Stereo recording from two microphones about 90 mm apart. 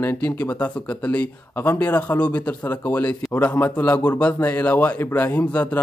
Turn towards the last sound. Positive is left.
turn(degrees=15)  # may be behind; listen again after turning